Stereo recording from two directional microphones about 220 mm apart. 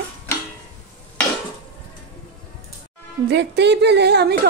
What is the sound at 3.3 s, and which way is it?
Speech, 50° right (ahead or behind).